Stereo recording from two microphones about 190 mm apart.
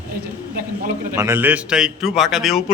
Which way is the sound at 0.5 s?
50° right (ahead or behind).